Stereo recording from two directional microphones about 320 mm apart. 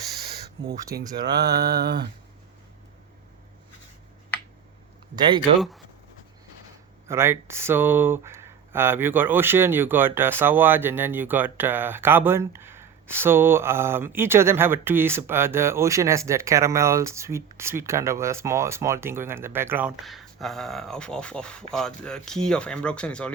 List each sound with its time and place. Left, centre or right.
1.3 s mantra: right
5.1 s speech: centre
5.5 s speech: centre
7.1 s speech: centre